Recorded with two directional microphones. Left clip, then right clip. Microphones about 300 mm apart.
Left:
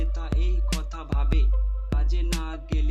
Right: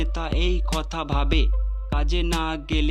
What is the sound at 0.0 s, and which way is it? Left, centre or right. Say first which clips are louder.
Music: right 9 dB; right.